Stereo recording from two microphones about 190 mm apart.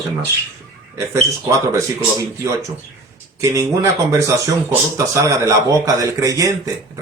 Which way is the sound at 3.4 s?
15° right (ahead or behind).